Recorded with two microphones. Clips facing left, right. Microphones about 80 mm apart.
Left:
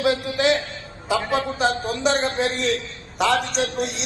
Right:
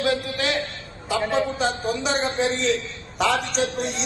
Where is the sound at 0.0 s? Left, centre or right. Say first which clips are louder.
Left 3 dB; centre.